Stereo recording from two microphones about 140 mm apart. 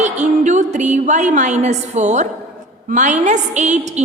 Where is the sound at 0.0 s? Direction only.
60° right (ahead or behind).